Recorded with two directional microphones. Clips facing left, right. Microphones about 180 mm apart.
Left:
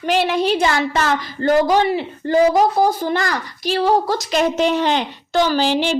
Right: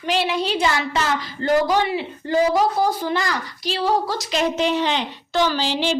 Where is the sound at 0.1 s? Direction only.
50° left (ahead or behind).